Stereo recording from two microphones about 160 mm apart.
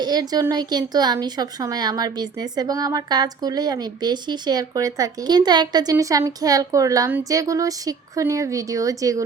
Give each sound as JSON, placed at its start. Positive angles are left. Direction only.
{"t": 0.0, "sound": "a woman's voice", "side_deg": -25}